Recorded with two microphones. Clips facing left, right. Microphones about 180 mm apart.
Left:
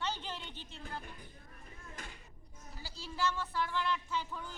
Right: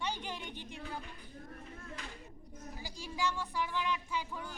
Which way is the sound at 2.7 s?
15° right (ahead or behind).